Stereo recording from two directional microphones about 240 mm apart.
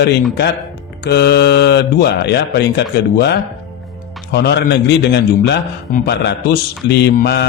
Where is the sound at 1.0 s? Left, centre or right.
Left.